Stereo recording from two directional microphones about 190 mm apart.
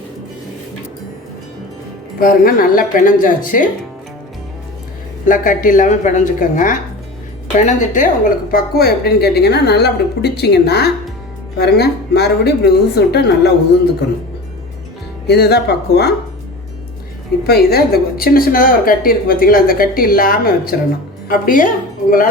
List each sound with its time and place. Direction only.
2.1 s a woman's voice: 50° left (ahead or behind)
5.2 s a woman's voice: 45° left (ahead or behind)
15.3 s a woman's voice: 60° left (ahead or behind)
17.4 s a woman's voice: 55° left (ahead or behind)